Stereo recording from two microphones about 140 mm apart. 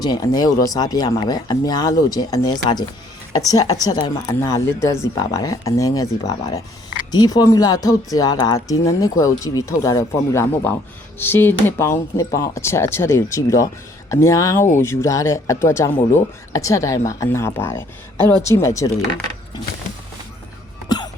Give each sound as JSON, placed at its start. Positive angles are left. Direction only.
{"t": 0.0, "sound": "speech", "side_deg": 25}
{"t": 20.8, "sound": "music", "side_deg": 30}